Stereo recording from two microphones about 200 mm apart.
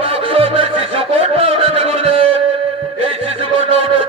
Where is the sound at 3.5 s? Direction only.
25° right (ahead or behind).